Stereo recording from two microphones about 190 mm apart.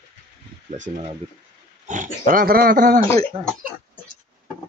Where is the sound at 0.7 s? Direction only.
40° right (ahead or behind).